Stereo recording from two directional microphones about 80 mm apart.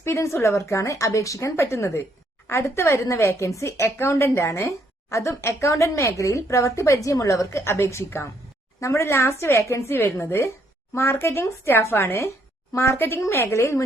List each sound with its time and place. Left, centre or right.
0.0 s a woman's voice: left